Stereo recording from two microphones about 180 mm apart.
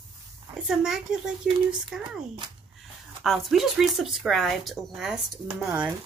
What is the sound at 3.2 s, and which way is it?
Speech, centre (ahead or behind).